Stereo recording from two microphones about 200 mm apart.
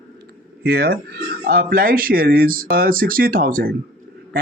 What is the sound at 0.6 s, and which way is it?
Speech, 50° right (ahead or behind).